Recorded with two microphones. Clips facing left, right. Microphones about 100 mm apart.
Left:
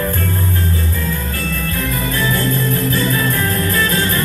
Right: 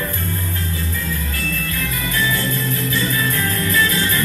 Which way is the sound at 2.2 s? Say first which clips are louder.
Left 2 dB; 50° left (ahead or behind).